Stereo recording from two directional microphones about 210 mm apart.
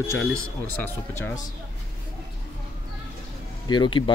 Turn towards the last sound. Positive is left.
turn(degrees=20)  # may be behind; listen again after turning